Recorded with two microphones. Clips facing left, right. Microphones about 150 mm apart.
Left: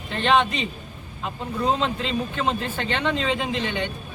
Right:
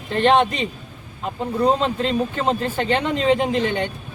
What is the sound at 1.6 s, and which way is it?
Speech, 40° right (ahead or behind).